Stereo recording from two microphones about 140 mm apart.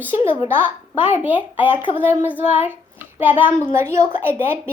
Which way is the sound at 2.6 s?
15° right (ahead or behind).